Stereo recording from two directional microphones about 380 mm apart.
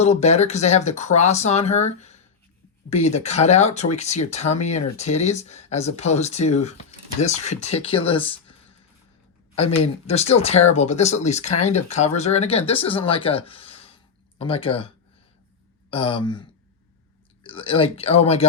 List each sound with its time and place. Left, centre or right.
0.0 s speech: centre
9.6 s speech: centre
15.9 s speech: centre